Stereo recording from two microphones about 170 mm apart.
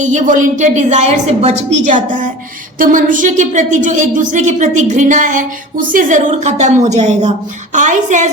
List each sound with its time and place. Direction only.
0.0 s a woman's voice: 45° right (ahead or behind)